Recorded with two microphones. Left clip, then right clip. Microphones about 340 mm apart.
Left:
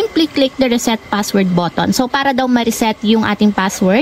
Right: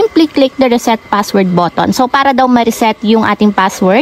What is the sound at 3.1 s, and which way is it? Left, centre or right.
Speech, left.